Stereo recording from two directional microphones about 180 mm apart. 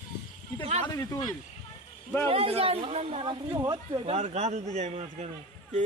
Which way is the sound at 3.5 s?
20° right (ahead or behind).